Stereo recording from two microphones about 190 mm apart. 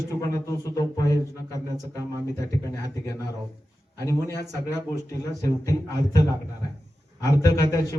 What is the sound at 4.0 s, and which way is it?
Speech, 15° left (ahead or behind).